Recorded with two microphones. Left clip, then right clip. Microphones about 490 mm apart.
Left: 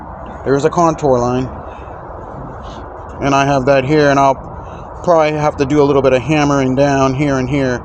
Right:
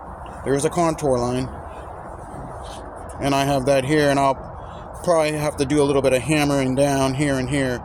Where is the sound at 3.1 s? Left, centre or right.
Right.